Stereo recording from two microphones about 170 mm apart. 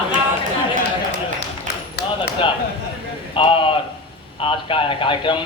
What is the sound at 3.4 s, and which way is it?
A man's voice, 30° left (ahead or behind).